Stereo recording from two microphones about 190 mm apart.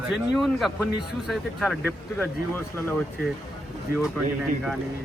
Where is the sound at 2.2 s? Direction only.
10° left (ahead or behind).